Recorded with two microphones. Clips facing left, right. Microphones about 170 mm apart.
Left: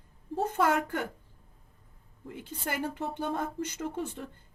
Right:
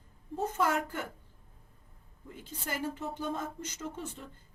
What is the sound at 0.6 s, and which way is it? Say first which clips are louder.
Speech: left 4 dB; 60° left (ahead or behind).